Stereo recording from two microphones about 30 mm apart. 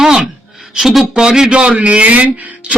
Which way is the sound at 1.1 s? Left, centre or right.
Right.